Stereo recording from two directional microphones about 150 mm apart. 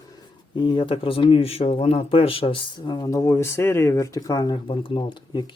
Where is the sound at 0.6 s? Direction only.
30° left (ahead or behind).